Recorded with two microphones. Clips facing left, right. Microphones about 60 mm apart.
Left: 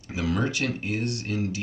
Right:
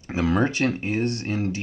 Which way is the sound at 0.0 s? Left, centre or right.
Right.